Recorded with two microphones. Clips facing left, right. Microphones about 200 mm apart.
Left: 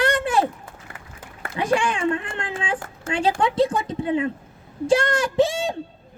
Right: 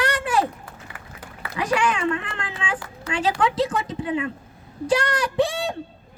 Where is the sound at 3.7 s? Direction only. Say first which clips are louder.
Left 2 dB; 35° left (ahead or behind).